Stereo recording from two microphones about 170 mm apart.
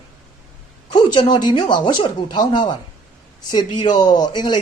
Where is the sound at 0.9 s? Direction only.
25° left (ahead or behind).